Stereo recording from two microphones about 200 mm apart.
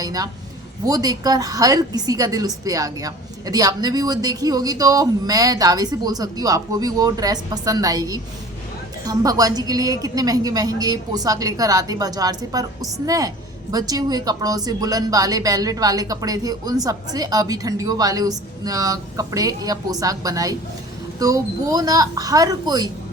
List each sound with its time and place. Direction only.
0.0 s a woman's voice: 20° right (ahead or behind)